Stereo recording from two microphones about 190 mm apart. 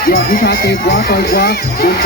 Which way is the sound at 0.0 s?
50° left (ahead or behind).